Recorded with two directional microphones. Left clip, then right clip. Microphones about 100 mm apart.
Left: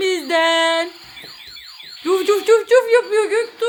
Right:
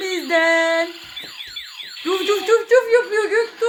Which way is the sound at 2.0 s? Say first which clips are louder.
Left 3 dB; 45° left (ahead or behind).